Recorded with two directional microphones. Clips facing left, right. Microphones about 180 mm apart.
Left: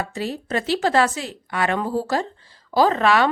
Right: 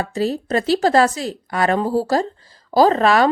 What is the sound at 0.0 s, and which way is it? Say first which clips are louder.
Speech: right 6 dB; 35° right (ahead or behind).